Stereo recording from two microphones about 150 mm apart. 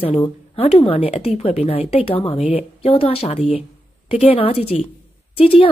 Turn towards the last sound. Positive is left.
turn(degrees=40)  # may be behind; listen again after turning